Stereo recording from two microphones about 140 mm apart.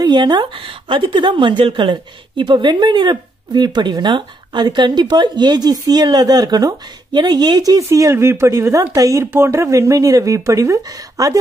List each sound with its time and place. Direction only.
0.0 s a woman's voice: 30° right (ahead or behind)